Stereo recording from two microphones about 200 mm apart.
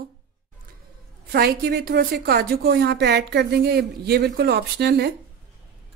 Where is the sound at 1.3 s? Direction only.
50° right (ahead or behind).